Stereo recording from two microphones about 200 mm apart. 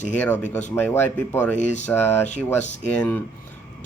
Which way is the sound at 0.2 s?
10° left (ahead or behind).